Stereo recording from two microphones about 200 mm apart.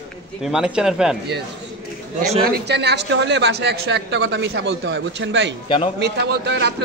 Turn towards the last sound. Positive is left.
turn(degrees=-55)  # may be behind; listen again after turning